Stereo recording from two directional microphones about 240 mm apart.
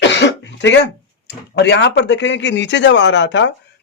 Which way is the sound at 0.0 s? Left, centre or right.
Left.